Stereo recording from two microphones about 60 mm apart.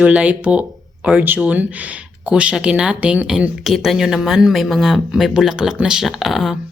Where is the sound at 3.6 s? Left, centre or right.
Centre.